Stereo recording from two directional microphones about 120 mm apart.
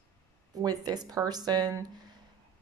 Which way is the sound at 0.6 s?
35° right (ahead or behind).